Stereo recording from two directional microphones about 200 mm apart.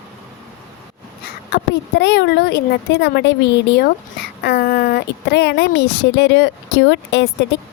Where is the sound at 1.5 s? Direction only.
60° left (ahead or behind).